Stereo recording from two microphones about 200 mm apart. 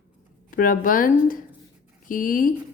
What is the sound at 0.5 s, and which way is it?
A woman's voice, 45° left (ahead or behind).